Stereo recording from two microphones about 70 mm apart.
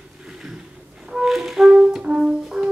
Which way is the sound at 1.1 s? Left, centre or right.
Centre.